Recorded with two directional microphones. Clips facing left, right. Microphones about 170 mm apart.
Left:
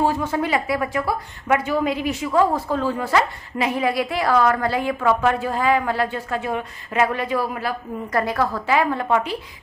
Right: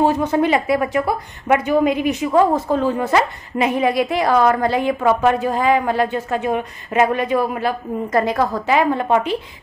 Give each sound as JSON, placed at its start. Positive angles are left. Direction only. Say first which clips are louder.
{"t": 0.0, "sound": "speech", "louder": "right 5 dB", "side_deg": -20}